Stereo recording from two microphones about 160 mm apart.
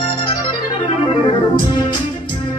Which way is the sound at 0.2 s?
30° left (ahead or behind).